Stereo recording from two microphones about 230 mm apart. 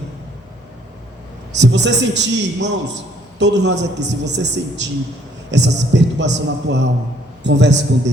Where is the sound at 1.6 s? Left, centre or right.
Right.